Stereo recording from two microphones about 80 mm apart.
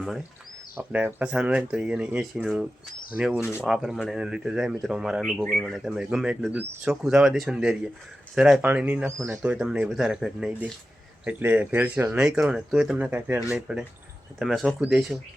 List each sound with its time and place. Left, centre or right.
0.8 s speech: right
1.2 s speech: centre
6.5 s speech: right
6.8 s speech: centre
8.6 s speech: right
9.4 s speech: centre
11.3 s speech: right
12.1 s speech: centre
13.5 s speech: centre